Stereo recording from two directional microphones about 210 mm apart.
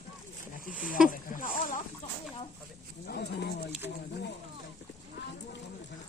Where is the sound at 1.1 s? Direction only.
40° left (ahead or behind).